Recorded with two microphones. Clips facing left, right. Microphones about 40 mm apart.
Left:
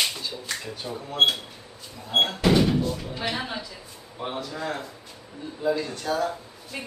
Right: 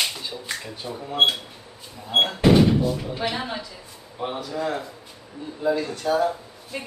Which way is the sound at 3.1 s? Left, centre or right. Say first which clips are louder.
Right 2 dB; centre.